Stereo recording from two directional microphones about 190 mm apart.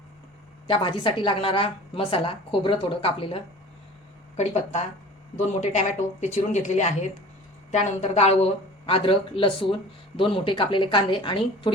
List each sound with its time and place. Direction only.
0.7 s a woman's voice: 25° left (ahead or behind)